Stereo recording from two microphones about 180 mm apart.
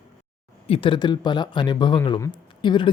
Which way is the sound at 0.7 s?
30° left (ahead or behind).